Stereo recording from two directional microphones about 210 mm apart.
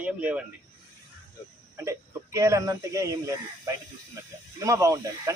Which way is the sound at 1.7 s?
15° right (ahead or behind).